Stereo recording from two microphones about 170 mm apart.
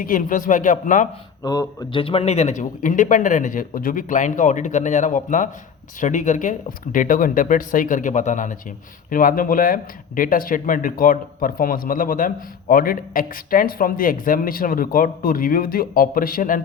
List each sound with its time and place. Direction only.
0.0 s speech: 55° left (ahead or behind)
1.5 s speech: 20° left (ahead or behind); by 16.6 s 55° left (ahead or behind)